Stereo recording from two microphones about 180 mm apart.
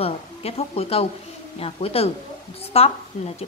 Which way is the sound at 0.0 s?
35° left (ahead or behind).